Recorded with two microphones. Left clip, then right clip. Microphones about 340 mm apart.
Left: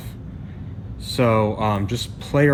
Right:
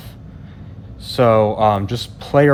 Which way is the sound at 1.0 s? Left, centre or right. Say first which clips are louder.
Right 6 dB; right.